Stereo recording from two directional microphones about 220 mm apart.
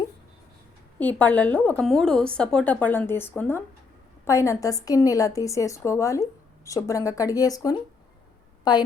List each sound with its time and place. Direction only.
0.9 s a woman's voice: 5° left (ahead or behind)